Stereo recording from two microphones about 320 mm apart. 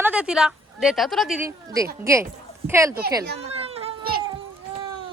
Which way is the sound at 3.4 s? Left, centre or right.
Centre.